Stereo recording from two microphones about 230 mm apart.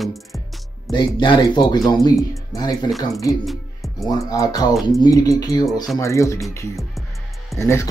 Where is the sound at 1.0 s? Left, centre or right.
Centre.